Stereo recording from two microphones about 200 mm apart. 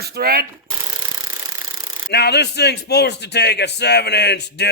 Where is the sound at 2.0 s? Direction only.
55° left (ahead or behind).